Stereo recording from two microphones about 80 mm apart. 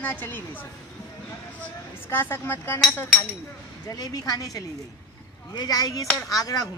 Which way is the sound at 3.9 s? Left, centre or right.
Left.